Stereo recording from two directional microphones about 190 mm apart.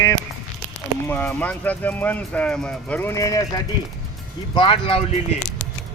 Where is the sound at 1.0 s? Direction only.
10° left (ahead or behind).